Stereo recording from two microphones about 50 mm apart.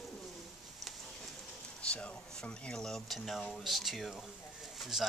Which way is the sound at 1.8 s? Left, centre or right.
Left.